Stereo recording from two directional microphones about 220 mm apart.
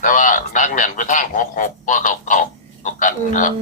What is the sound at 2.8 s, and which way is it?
Frog, 35° left (ahead or behind).